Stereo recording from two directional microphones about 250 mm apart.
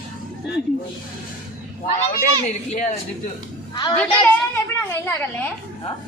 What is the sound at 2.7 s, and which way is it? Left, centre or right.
Speech, left.